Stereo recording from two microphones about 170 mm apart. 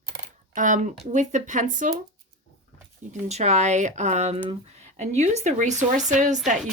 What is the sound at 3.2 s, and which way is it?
Speech, 40° right (ahead or behind).